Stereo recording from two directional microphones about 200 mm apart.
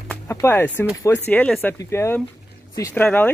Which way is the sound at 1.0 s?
10° left (ahead or behind).